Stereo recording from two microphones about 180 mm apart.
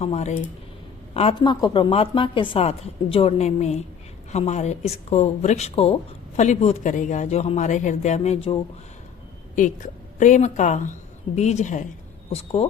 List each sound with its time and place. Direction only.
0.0 s speech: 35° left (ahead or behind)
9.6 s a woman's voice: 45° left (ahead or behind)